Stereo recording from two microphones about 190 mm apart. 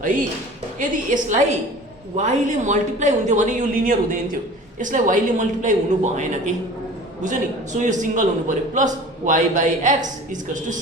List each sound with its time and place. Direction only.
0.8 s a woman's voice: 45° right (ahead or behind)